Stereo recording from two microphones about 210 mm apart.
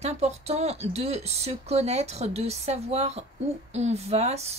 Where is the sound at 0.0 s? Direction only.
30° right (ahead or behind).